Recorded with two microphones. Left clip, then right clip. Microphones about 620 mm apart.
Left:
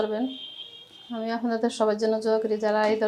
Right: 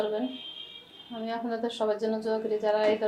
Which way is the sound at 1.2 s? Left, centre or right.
Left.